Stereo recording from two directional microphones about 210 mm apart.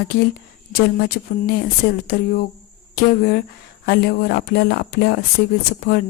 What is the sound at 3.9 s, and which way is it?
Speech, 50° left (ahead or behind).